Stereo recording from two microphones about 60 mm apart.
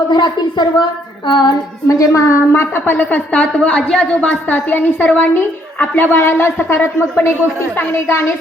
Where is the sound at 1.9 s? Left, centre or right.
Left.